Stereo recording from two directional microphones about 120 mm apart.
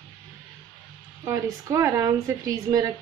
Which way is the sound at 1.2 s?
25° right (ahead or behind).